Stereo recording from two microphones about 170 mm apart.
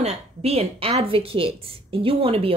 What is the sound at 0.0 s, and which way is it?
A woman's voice, 40° right (ahead or behind).